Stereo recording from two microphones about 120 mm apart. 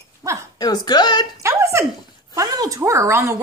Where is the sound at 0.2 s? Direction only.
25° right (ahead or behind).